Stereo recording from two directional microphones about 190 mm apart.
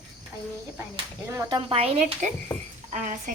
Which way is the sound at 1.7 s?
30° right (ahead or behind).